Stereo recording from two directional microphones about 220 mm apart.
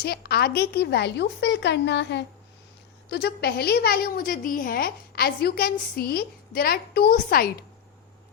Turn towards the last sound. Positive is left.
turn(degrees=40)  # may be behind; listen again after turning